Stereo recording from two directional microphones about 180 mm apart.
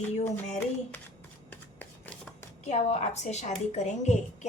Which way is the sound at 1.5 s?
10° left (ahead or behind).